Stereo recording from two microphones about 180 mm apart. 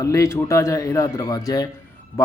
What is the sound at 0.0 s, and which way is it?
Speech, 15° left (ahead or behind).